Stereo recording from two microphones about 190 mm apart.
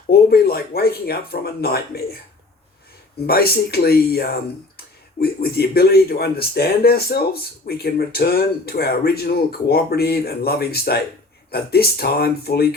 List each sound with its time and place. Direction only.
0.1 s speech: 55° left (ahead or behind)
3.2 s speech: 55° left (ahead or behind)